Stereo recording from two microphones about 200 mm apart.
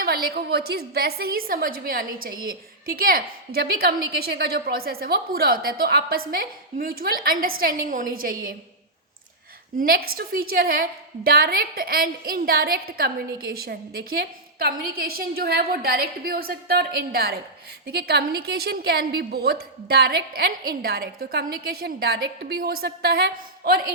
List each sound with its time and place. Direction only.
0.0 s a woman's voice: 50° right (ahead or behind)
9.7 s a woman's voice: 45° right (ahead or behind)